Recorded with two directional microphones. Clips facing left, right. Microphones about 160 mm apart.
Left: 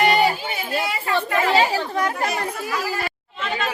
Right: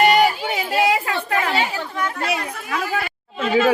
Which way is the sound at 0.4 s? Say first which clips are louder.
Right 6 dB; 90° right.